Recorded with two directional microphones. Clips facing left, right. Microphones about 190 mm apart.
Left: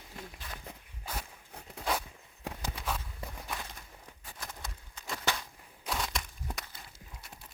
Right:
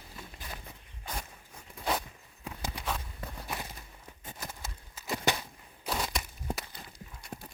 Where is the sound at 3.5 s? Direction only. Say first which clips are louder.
Right 2 dB; 10° right (ahead or behind).